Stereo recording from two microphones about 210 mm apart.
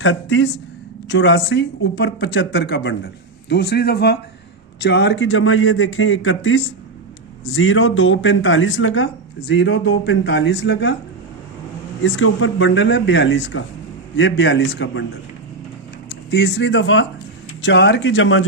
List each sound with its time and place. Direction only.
0.0 s a man's voice: 65° left (ahead or behind)
12.0 s speech: 65° left (ahead or behind)
16.0 s speech: 50° left (ahead or behind); by 18.4 s 65° left (ahead or behind)